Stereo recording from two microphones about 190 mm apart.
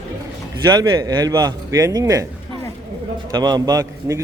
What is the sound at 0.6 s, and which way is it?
A man's voice, 20° right (ahead or behind).